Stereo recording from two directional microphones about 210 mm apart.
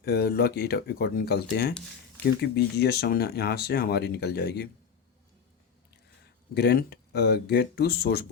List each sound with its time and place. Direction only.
0.0 s speech: 50° left (ahead or behind)
6.5 s speech: 50° left (ahead or behind)